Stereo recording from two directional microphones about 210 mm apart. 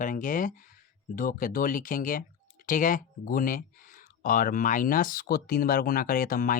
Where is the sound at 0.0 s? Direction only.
40° left (ahead or behind).